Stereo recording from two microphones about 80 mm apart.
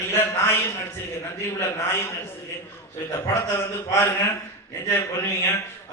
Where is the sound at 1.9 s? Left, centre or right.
Left.